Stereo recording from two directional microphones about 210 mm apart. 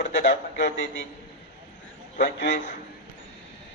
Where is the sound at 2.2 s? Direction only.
55° left (ahead or behind).